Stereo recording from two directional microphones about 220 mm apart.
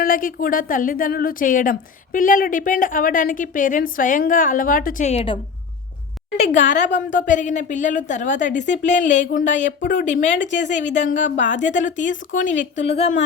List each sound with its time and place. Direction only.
0.0 s a woman's voice: 40° left (ahead or behind)